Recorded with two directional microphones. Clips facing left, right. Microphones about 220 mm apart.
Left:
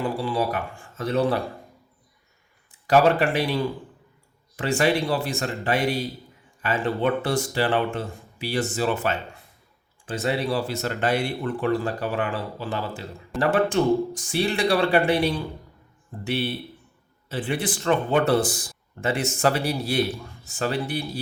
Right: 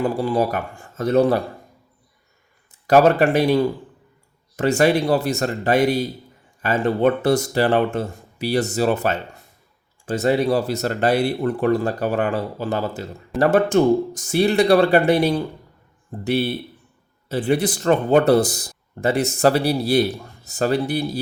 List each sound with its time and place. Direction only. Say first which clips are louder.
0.0 s speech: right 5 dB; 45° right (ahead or behind)
2.8 s speech: right 4 dB; 40° right (ahead or behind)